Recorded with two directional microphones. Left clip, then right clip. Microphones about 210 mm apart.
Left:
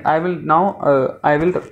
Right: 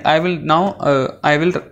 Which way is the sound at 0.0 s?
45° right (ahead or behind).